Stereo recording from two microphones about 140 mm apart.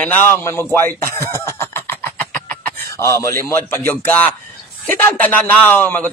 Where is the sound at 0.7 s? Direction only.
15° left (ahead or behind).